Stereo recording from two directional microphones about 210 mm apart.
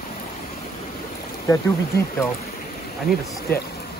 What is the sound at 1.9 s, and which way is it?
Speech, 45° left (ahead or behind).